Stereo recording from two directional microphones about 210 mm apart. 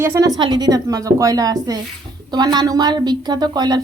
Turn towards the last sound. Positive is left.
turn(degrees=-20)  # may be behind; listen again after turning